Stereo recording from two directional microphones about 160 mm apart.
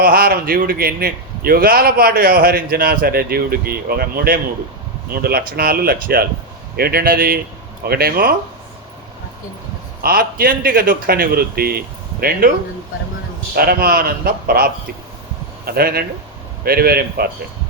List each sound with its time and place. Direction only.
0.0 s a man's voice: 70° right (ahead or behind)
10.0 s a man's voice: 70° right (ahead or behind)
13.6 s a man's voice: 70° right (ahead or behind)